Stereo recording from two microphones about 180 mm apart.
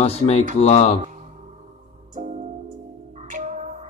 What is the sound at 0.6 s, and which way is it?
Speech, 40° left (ahead or behind).